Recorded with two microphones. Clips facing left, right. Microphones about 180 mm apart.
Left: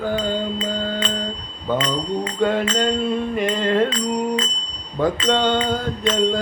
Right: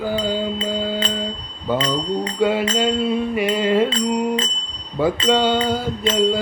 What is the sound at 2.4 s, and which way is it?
Music, 5° right (ahead or behind).